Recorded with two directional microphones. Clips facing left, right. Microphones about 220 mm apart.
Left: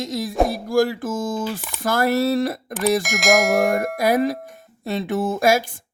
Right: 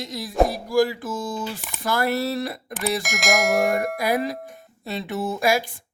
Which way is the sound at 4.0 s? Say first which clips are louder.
Left 5 dB; 45° left (ahead or behind).